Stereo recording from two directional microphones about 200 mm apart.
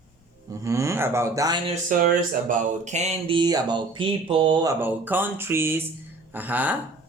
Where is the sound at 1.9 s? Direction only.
45° right (ahead or behind); by 6.7 s 10° right (ahead or behind).